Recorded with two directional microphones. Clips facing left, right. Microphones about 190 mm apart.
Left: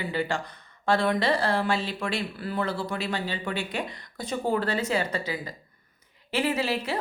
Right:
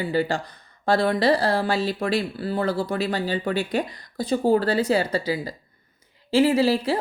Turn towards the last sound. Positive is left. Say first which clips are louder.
# right 7 dB
turn(degrees=-35)  # may be behind; listen again after turning